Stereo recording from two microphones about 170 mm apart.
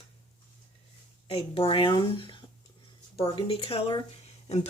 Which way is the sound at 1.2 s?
35° left (ahead or behind).